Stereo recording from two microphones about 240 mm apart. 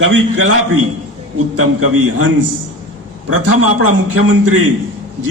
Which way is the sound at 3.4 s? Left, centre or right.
Right.